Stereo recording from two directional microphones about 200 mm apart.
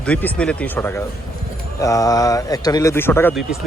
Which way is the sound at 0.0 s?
5° left (ahead or behind).